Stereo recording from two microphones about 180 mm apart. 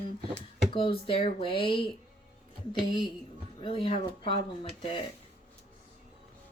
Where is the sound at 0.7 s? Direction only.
30° left (ahead or behind).